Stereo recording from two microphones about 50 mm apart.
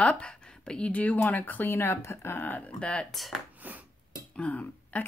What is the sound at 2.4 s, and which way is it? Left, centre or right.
Speech, left.